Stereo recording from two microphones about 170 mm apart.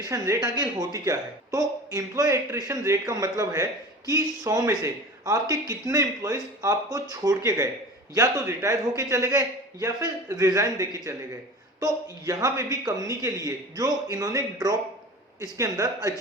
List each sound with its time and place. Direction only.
0.1 s a man's voice: 20° right (ahead or behind)